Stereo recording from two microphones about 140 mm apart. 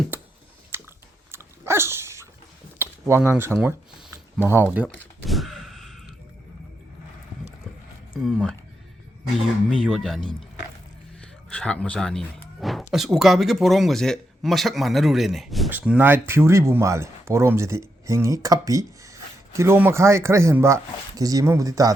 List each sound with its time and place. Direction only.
0.1 s a sound: 10° right (ahead or behind)
0.7 s chewing: 15° right (ahead or behind)
1.3 s dog: 20° right (ahead or behind)
2.7 s a sound: 15° right (ahead or behind)
4.4 s speech: 15° right (ahead or behind)
5.2 s gasp: centre (ahead or behind)
8.2 s speech: centre (ahead or behind)
9.6 s speech: centre (ahead or behind)
11.4 s speech: 5° left (ahead or behind)
15.8 s speech: 10° right (ahead or behind)